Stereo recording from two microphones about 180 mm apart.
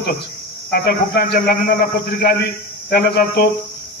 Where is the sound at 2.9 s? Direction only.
65° left (ahead or behind).